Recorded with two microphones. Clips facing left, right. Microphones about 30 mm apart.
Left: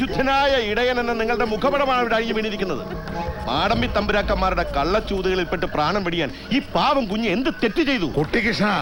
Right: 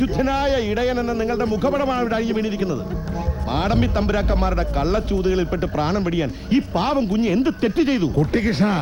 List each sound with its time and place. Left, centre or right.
0.0 s a man's voice: left